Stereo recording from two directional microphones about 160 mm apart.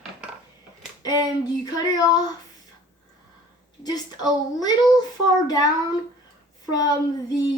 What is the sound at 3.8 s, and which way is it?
Child singing, 25° left (ahead or behind).